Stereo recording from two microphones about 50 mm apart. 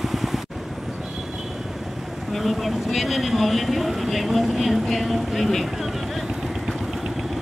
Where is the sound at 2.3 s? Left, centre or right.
Centre.